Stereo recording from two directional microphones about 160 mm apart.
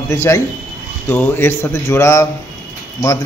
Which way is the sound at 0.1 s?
15° left (ahead or behind).